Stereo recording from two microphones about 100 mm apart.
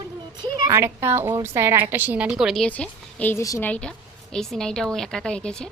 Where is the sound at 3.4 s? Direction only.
35° left (ahead or behind).